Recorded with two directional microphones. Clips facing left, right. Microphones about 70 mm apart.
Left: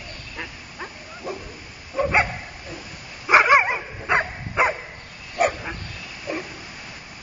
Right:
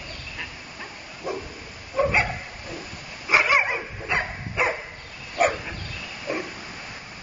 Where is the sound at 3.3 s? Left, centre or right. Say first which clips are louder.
Left 5 dB; left.